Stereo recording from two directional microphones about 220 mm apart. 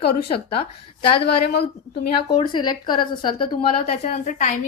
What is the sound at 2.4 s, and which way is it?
A woman's voice, 20° left (ahead or behind).